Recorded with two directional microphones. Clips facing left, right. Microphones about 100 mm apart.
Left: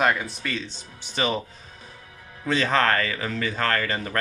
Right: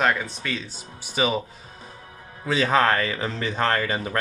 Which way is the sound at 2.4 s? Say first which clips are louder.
Right 2 dB; 10° right (ahead or behind).